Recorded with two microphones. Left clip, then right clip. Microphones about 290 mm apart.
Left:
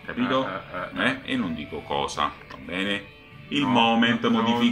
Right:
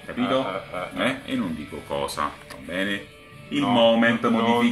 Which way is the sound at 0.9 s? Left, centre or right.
Centre.